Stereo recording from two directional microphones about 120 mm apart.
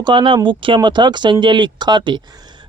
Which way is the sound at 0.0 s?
40° right (ahead or behind).